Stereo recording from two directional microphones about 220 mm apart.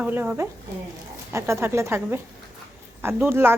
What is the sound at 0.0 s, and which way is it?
Speech, 10° right (ahead or behind).